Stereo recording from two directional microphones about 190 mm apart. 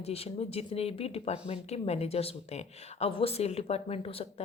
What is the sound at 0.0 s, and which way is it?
Speech, 30° left (ahead or behind).